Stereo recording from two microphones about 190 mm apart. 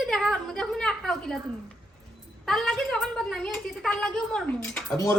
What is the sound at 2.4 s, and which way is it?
A woman's voice, centre (ahead or behind).